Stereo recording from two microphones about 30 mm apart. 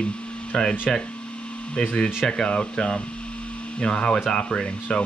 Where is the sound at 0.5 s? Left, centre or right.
Left.